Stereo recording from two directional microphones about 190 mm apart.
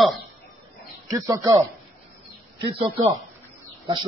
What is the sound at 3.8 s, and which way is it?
Speech, 25° right (ahead or behind).